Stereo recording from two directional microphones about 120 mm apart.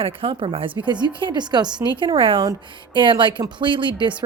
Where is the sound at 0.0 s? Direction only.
45° right (ahead or behind).